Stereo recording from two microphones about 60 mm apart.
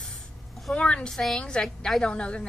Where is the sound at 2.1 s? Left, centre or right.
Centre.